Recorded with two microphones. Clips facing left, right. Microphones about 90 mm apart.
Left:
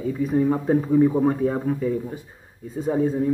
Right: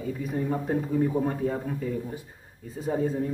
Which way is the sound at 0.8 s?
40° left (ahead or behind).